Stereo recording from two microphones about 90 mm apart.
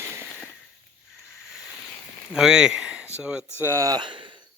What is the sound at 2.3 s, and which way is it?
Speech, 5° right (ahead or behind).